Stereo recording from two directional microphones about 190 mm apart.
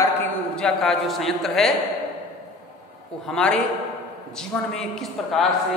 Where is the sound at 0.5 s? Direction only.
Centre (ahead or behind).